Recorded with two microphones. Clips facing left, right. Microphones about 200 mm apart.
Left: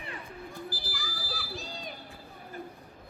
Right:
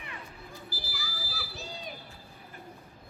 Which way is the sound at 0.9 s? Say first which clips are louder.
Left 3 dB; 5° right (ahead or behind).